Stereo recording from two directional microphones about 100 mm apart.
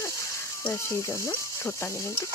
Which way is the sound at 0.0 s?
30° left (ahead or behind).